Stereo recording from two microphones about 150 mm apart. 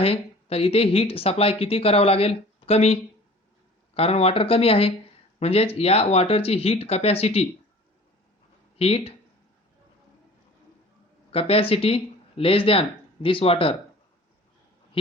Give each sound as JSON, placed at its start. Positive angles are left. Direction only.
{"t": 0.0, "sound": "speech", "side_deg": 40}
{"t": 8.8, "sound": "speech", "side_deg": 40}
{"t": 11.3, "sound": "speech", "side_deg": 40}